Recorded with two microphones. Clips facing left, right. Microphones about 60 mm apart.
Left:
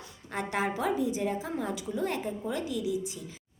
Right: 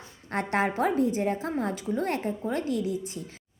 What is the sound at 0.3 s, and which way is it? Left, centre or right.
A woman's voice, right.